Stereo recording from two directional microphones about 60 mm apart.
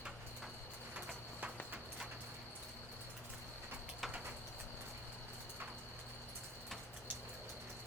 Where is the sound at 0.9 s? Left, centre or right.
Right.